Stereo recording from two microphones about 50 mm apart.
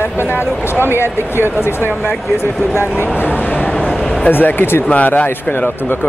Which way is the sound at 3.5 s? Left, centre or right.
Left.